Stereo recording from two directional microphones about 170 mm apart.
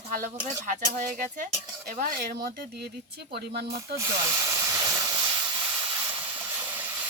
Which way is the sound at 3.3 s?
75° right (ahead or behind).